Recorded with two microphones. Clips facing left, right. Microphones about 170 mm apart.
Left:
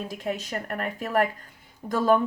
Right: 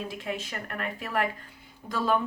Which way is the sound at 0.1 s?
40° left (ahead or behind).